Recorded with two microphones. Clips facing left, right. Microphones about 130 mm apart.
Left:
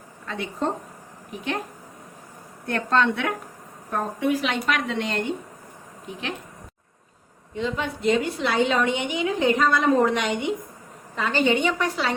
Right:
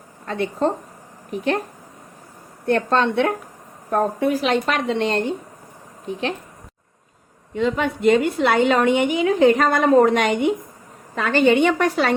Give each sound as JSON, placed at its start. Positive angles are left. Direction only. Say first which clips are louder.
{"t": 0.3, "sound": "a woman's voice", "louder": "right 6 dB", "side_deg": -45}
{"t": 2.6, "sound": "a woman's voice", "louder": "right 4 dB", "side_deg": -30}
{"t": 7.5, "sound": "a woman's voice", "louder": "right 6 dB", "side_deg": -60}
{"t": 11.1, "sound": "a woman's voice", "louder": "right 5 dB", "side_deg": -60}